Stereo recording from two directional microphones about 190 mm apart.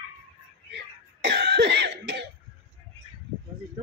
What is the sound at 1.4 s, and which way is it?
Cough, 60° right (ahead or behind).